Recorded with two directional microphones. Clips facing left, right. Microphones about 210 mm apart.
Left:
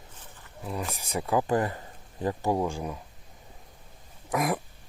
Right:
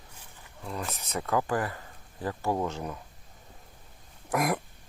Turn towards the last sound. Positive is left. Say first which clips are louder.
# even
turn(degrees=0)  # may be behind; listen again after turning